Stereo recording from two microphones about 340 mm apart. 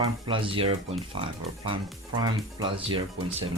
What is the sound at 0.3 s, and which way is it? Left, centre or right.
Speech, centre.